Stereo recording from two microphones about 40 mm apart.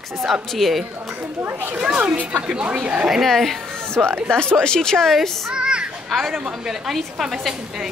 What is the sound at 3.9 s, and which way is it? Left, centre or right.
Speech, right.